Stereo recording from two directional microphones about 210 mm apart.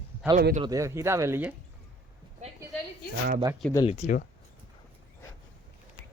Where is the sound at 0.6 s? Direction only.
15° right (ahead or behind).